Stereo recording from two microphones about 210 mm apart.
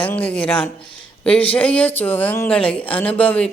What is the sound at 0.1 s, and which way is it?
Speech, 5° left (ahead or behind).